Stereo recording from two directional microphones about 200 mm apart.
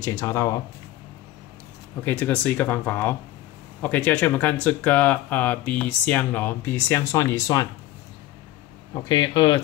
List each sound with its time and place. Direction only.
0.0 s speech: 15° left (ahead or behind)
2.0 s speech: 10° left (ahead or behind)
8.9 s speech: 20° left (ahead or behind)